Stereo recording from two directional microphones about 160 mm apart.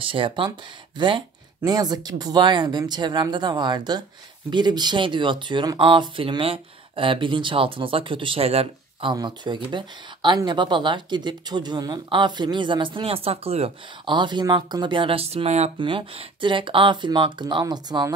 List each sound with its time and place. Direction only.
0.0 s speech: 35° right (ahead or behind)
9.1 s speech: 25° right (ahead or behind); by 15.9 s 40° right (ahead or behind)
15.9 s speech: 30° right (ahead or behind)